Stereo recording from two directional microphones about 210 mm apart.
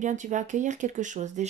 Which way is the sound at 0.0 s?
35° right (ahead or behind).